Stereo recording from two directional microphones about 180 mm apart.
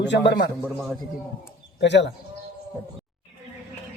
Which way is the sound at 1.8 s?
75° left (ahead or behind).